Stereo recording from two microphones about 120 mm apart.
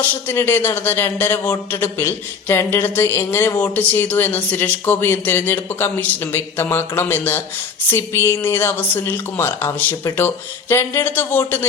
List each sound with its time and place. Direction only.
0.0 s a man's voice: 15° left (ahead or behind)